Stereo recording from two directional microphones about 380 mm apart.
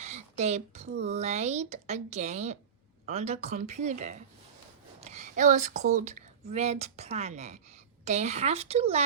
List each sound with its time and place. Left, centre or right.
0.0 s speech: centre